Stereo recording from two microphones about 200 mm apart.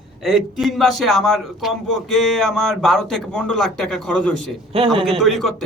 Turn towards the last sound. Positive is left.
turn(degrees=0)  # may be behind; listen again after turning